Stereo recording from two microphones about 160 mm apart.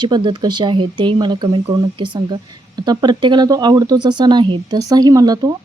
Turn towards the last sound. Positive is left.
turn(degrees=-25)  # may be behind; listen again after turning